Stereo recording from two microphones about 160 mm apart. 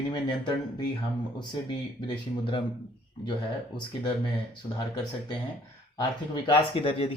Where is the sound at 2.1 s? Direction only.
30° left (ahead or behind).